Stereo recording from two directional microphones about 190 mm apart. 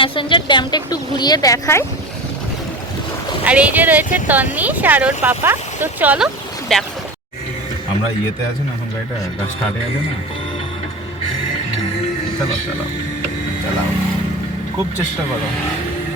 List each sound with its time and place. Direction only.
0.0 s a woman's voice: 25° left (ahead or behind)
3.4 s speech: 5° right (ahead or behind)